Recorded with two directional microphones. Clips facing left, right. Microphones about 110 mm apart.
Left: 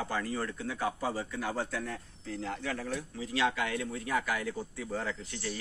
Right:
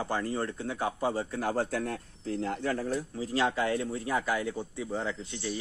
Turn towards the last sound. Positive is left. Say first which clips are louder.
# right 3 dB
turn(degrees=-20)  # may be behind; listen again after turning